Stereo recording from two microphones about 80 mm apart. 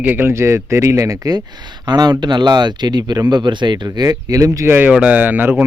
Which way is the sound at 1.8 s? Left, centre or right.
Right.